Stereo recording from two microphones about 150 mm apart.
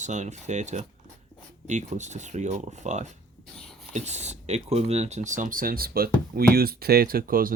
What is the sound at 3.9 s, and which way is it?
Speech, 50° right (ahead or behind).